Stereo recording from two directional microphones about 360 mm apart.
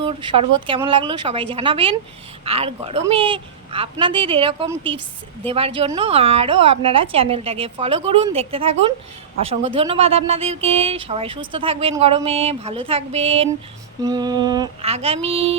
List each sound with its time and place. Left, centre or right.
0.0 s speech: centre